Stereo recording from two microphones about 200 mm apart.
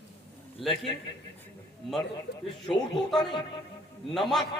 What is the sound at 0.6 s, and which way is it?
Speech, centre (ahead or behind).